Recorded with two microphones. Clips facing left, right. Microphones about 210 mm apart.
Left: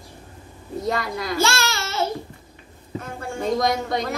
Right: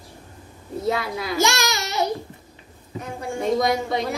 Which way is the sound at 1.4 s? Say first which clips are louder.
Right 2 dB; 15° right (ahead or behind).